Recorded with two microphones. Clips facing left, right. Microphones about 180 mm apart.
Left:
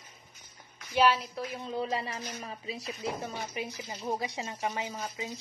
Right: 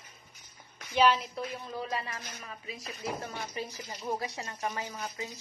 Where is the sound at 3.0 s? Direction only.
15° left (ahead or behind).